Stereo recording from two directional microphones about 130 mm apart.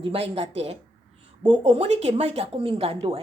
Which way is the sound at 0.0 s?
45° right (ahead or behind).